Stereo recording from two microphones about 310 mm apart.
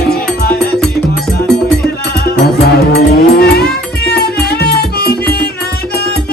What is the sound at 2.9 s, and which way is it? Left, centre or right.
Music, left.